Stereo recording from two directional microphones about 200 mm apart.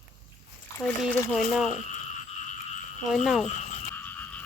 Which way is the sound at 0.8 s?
5° left (ahead or behind).